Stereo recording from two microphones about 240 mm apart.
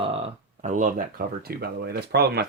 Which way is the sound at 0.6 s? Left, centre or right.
Right.